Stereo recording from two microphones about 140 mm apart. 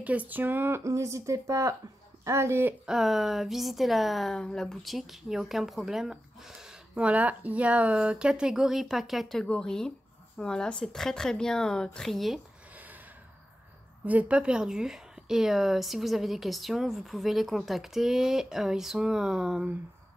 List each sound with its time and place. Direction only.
0.0 s speech: 10° right (ahead or behind)
2.9 s a woman's voice: centre (ahead or behind)
12.7 s gasp: 10° right (ahead or behind)
14.0 s a woman's voice: 10° right (ahead or behind)